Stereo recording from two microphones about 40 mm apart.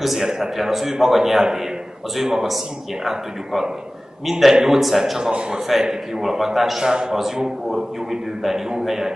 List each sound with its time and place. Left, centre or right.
0.0 s a man's voice: centre
6.8 s a man's voice: centre